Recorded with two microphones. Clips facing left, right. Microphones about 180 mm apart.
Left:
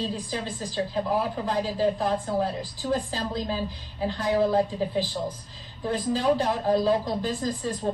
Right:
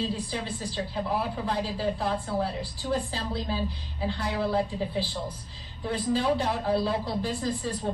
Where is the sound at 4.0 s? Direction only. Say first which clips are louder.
Left 5 dB; 40° left (ahead or behind).